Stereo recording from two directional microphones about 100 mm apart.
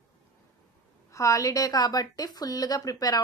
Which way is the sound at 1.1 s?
30° left (ahead or behind).